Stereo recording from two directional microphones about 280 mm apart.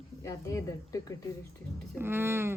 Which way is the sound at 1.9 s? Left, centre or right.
Centre.